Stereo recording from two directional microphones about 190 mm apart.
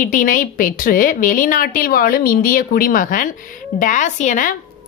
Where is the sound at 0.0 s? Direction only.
45° left (ahead or behind).